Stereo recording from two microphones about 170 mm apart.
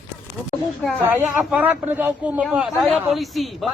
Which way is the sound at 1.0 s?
10° right (ahead or behind).